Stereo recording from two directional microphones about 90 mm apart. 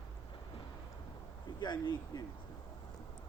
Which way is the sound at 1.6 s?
55° left (ahead or behind).